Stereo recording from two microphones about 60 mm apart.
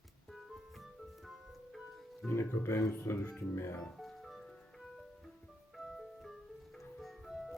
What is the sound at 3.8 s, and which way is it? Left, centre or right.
Music, centre.